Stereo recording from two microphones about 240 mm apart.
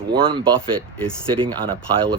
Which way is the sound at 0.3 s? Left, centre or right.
Centre.